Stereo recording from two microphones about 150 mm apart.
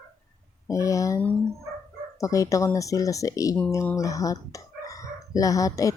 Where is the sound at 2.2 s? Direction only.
20° left (ahead or behind).